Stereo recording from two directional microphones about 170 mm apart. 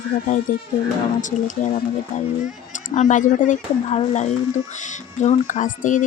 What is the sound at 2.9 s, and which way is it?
A woman's voice, 45° left (ahead or behind).